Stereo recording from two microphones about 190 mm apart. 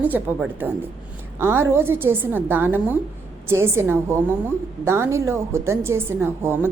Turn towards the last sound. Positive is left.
turn(degrees=-10)  # may be behind; listen again after turning